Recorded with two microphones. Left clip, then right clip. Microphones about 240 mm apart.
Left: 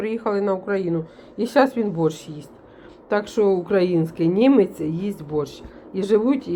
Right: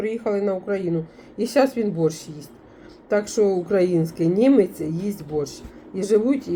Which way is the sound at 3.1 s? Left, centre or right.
Centre.